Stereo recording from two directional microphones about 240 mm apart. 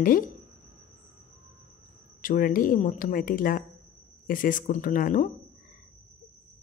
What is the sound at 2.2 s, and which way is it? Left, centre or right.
Speech, left.